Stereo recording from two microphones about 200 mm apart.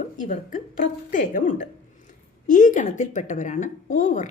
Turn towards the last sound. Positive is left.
turn(degrees=40)  # may be behind; listen again after turning